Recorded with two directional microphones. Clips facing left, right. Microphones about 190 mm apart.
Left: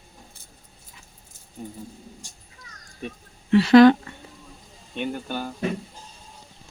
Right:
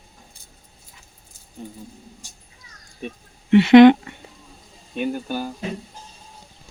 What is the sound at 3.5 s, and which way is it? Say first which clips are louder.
Speech: right 3 dB; 20° right (ahead or behind).